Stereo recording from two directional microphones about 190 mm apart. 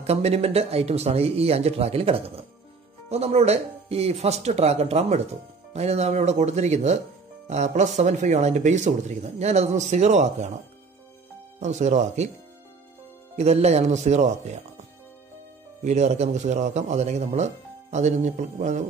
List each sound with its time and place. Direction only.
0.0 s a man's voice: 35° right (ahead or behind)
11.6 s a man's voice: 40° right (ahead or behind)
13.4 s a man's voice: 35° right (ahead or behind)
15.8 s a man's voice: 35° right (ahead or behind)